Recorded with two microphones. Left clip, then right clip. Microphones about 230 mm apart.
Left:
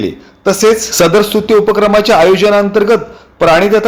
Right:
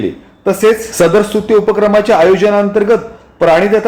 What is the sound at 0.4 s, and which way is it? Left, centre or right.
Speech, left.